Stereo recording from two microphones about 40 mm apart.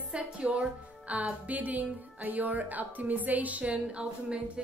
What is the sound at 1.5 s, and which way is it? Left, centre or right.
A woman's voice, right.